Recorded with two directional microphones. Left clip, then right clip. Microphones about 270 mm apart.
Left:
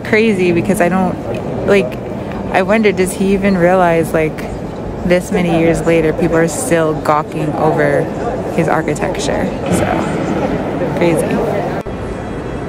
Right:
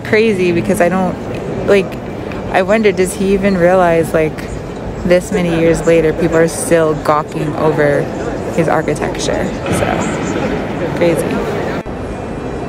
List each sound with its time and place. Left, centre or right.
0.1 s speech: centre
2.5 s speech: centre